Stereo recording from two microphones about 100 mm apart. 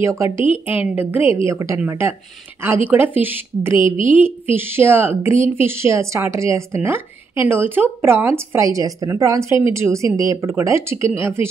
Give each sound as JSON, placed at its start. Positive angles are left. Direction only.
{"t": 0.0, "sound": "a woman's voice", "side_deg": -30}
{"t": 1.4, "sound": "a woman's voice", "side_deg": -30}
{"t": 8.5, "sound": "a woman's voice", "side_deg": -30}